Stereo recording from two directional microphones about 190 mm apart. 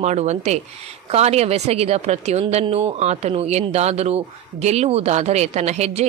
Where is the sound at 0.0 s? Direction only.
35° right (ahead or behind).